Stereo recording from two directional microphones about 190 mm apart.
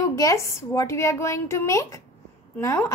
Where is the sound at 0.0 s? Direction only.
15° left (ahead or behind).